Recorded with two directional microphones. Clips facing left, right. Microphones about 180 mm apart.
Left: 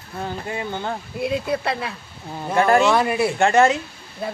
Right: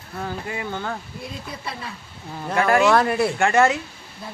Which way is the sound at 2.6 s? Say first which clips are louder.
Left 2 dB; 25° left (ahead or behind).